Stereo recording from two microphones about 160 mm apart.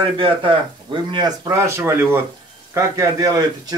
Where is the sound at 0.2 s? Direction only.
30° right (ahead or behind).